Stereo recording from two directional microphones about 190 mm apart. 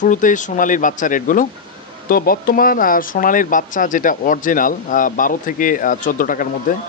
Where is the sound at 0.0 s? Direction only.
40° left (ahead or behind).